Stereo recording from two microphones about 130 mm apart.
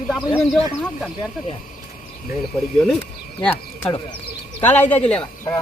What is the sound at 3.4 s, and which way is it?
Speech, 15° left (ahead or behind).